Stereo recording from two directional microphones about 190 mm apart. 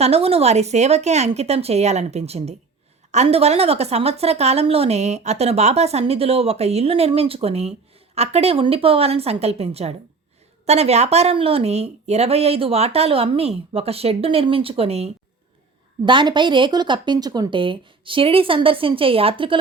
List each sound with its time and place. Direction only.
0.0 s a woman's voice: 30° right (ahead or behind)